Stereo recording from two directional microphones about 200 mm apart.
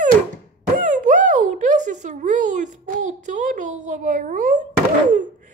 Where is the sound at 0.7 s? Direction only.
40° right (ahead or behind).